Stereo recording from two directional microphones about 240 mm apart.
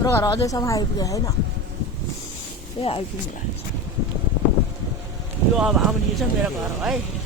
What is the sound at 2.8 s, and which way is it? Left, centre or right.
Speech, left.